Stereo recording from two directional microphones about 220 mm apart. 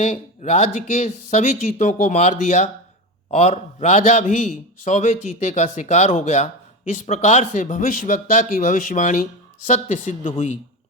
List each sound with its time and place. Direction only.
0.0 s a man's voice: 35° left (ahead or behind)